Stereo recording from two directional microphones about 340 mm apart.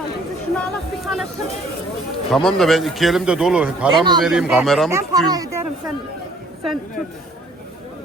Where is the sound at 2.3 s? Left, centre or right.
Centre.